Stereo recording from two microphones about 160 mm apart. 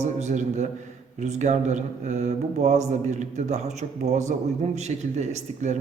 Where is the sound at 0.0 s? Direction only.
45° right (ahead or behind).